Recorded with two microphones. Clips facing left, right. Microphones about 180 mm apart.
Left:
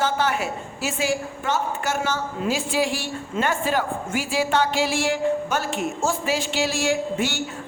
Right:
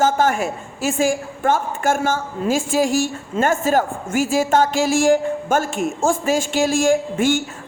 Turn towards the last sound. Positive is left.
turn(degrees=-50)  # may be behind; listen again after turning